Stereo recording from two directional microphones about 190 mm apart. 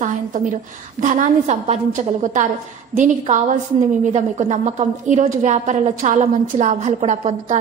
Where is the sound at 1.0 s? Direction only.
40° right (ahead or behind).